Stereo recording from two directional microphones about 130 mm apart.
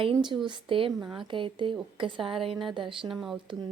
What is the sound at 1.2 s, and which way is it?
Speech, 40° right (ahead or behind).